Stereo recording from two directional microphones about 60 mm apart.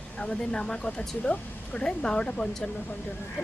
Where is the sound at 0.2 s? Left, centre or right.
Centre.